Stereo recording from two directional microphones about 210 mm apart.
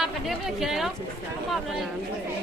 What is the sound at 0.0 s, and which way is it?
Speech, centre (ahead or behind).